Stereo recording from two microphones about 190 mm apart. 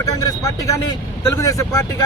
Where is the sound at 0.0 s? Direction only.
20° left (ahead or behind).